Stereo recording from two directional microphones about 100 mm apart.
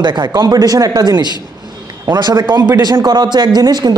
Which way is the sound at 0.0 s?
50° right (ahead or behind).